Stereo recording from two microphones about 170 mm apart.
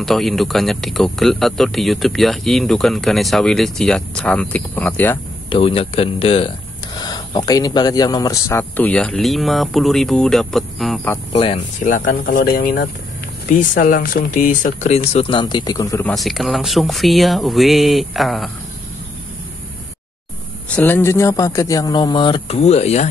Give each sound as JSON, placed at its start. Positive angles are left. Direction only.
{"t": 0.0, "sound": "speech", "side_deg": 0}
{"t": 5.5, "sound": "speech", "side_deg": 35}
{"t": 11.3, "sound": "speech", "side_deg": 40}
{"t": 16.1, "sound": "speech", "side_deg": 0}
{"t": 20.7, "sound": "speech", "side_deg": 10}